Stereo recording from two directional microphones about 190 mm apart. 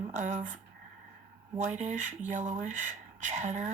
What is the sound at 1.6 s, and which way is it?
Speech, 40° right (ahead or behind).